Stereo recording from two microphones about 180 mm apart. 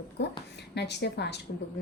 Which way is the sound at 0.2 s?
75° left (ahead or behind).